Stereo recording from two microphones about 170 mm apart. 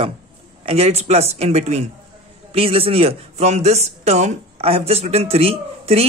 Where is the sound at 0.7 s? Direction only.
40° right (ahead or behind).